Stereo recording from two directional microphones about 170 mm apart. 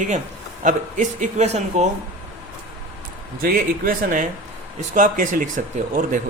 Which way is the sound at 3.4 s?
60° right (ahead or behind).